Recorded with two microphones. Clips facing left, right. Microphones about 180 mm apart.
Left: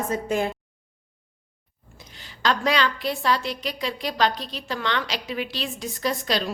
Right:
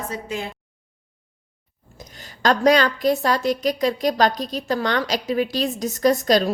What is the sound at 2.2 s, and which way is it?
A woman's voice, 45° right (ahead or behind).